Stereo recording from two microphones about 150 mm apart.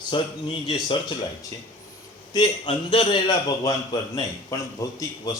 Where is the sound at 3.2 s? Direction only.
25° left (ahead or behind).